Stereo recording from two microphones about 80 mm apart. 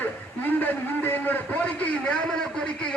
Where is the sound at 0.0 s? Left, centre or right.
Left.